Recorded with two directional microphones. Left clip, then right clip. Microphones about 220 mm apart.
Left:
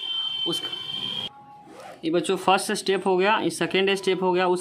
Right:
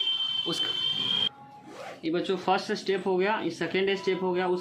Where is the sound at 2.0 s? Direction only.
35° left (ahead or behind).